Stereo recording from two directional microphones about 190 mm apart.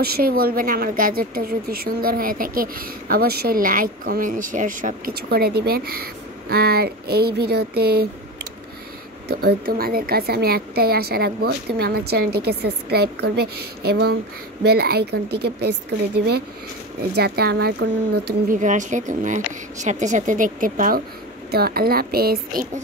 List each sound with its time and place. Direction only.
0.0 s a woman's voice: 50° right (ahead or behind)
9.3 s a woman's voice: 55° right (ahead or behind)
17.1 s a woman's voice: 55° right (ahead or behind)
18.6 s speech: 40° right (ahead or behind)